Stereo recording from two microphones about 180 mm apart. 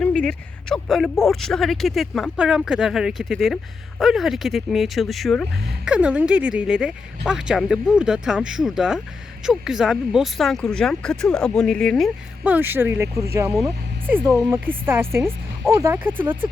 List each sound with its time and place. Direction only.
0.0 s speech: 5° left (ahead or behind); by 13.5 s 15° right (ahead or behind)
14.5 s speech: 10° right (ahead or behind)